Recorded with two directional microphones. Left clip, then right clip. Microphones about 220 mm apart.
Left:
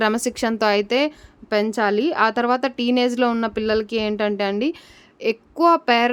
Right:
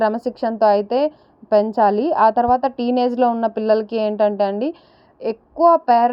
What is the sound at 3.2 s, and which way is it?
Speech, 35° left (ahead or behind).